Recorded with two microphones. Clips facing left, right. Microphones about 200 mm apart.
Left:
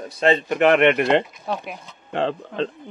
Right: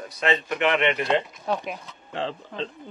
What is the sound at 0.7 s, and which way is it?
Speech, 60° left (ahead or behind).